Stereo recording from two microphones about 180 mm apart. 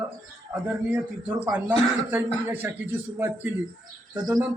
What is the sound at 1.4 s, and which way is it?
Speech, 10° right (ahead or behind).